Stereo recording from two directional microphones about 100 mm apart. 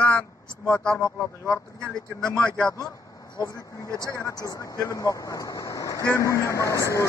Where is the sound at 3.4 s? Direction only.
40° left (ahead or behind).